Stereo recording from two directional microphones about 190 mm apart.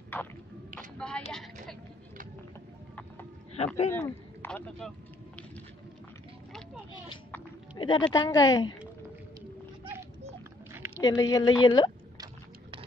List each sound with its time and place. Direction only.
0.1 s a sound: 10° left (ahead or behind)
0.9 s a woman's voice: 5° left (ahead or behind)
3.5 s speech: 35° left (ahead or behind)
3.9 s speech: 10° left (ahead or behind)
7.7 s speech: 25° left (ahead or behind)
11.0 s speech: 20° left (ahead or behind)